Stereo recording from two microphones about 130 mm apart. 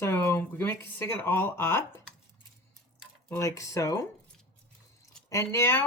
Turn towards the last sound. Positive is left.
turn(degrees=20)  # may be behind; listen again after turning